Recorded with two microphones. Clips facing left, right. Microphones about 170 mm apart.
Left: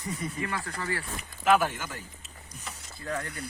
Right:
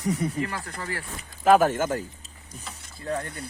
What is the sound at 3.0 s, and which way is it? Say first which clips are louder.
Speech: right 4 dB; 30° right (ahead or behind).